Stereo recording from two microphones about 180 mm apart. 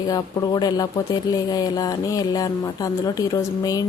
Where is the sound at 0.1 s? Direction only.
20° left (ahead or behind).